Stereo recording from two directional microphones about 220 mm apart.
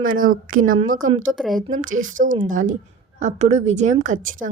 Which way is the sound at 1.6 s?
35° right (ahead or behind).